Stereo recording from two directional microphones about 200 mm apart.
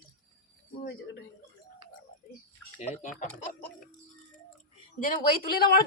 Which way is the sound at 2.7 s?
35° left (ahead or behind).